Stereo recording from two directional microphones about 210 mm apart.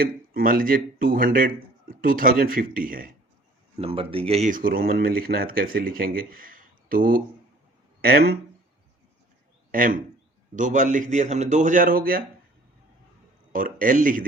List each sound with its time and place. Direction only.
0.0 s speech: 45° right (ahead or behind)
3.8 s speech: 25° right (ahead or behind); by 8.4 s 45° right (ahead or behind)
9.7 s a man's voice: 40° right (ahead or behind)
13.5 s a man's voice: 40° right (ahead or behind)